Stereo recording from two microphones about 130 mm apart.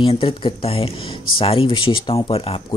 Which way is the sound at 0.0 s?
45° left (ahead or behind).